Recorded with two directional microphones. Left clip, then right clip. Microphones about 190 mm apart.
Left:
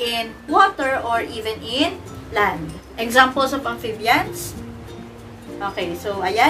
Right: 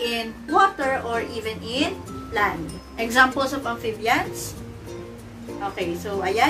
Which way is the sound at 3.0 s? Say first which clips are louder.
Left 3 dB; 15° left (ahead or behind).